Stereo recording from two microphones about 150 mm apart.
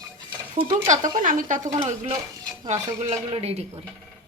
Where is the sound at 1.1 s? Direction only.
60° right (ahead or behind).